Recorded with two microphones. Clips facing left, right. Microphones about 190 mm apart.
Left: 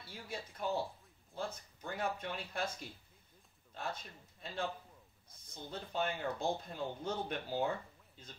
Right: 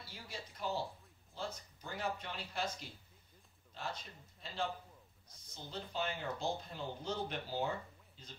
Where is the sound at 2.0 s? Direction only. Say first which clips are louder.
Left 2 dB; 50° left (ahead or behind).